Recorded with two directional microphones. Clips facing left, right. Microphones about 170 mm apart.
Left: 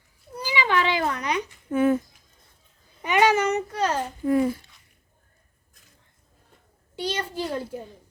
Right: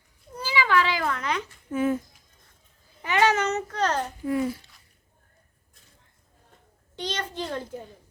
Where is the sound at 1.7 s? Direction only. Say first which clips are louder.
Left 4 dB; 65° left (ahead or behind).